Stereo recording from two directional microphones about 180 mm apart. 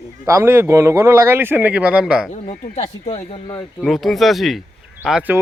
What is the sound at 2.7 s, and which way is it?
Speech, 35° left (ahead or behind).